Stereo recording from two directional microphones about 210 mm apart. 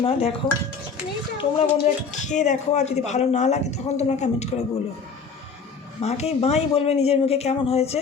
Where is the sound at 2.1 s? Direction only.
35° left (ahead or behind).